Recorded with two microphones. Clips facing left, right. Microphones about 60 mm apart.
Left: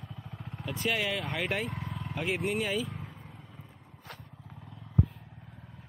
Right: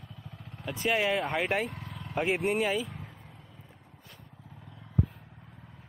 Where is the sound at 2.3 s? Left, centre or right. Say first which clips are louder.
Right 2 dB; centre.